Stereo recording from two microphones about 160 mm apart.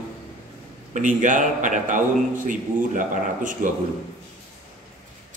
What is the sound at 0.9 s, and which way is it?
A man's voice, 55° right (ahead or behind).